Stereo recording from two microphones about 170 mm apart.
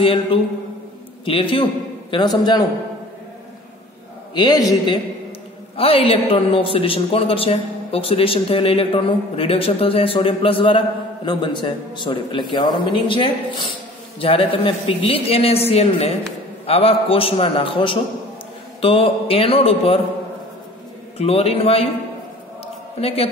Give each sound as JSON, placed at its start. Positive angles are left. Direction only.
{"t": 0.0, "sound": "a man's voice", "side_deg": 30}
{"t": 4.4, "sound": "a man's voice", "side_deg": 20}
{"t": 5.8, "sound": "a man's voice", "side_deg": 35}
{"t": 21.2, "sound": "a man's voice", "side_deg": 35}
{"t": 22.9, "sound": "a man's voice", "side_deg": 35}